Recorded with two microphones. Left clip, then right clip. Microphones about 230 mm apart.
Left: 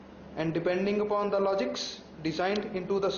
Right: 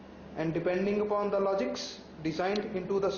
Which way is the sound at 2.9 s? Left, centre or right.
Left.